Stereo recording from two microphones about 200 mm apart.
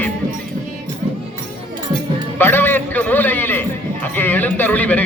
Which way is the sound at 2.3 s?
10° left (ahead or behind).